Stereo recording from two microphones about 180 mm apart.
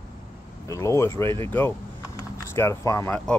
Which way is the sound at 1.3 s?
25° right (ahead or behind).